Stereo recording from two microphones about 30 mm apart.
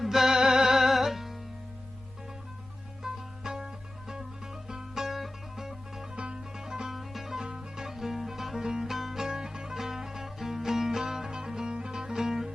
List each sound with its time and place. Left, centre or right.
0.0 s music: centre
3.0 s music: right
4.7 s music: centre
6.1 s music: right
6.7 s music: right
6.9 s music: centre
7.3 s music: right
7.9 s music: centre
9.3 s music: right